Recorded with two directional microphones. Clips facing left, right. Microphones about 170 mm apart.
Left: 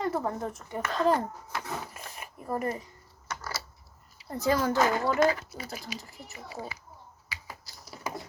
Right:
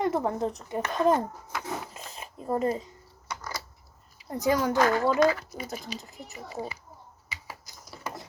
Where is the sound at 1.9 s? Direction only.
20° right (ahead or behind).